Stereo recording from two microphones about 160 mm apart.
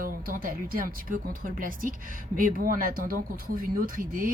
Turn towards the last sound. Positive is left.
turn(degrees=-60)  # may be behind; listen again after turning